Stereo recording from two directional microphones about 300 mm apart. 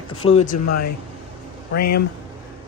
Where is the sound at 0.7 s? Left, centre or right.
Left.